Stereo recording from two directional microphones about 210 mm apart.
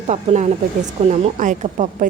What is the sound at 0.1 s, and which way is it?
A woman's voice, 35° right (ahead or behind).